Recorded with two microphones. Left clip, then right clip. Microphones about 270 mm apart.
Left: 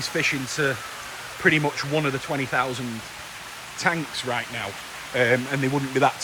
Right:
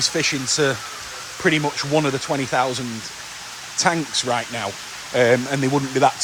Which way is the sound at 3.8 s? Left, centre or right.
Centre.